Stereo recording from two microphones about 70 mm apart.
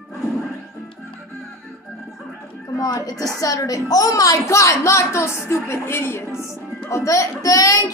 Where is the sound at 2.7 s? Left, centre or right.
Left.